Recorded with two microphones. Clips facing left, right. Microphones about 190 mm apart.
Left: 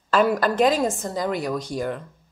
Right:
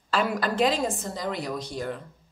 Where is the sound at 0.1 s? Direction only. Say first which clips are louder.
Left 6 dB; 45° left (ahead or behind).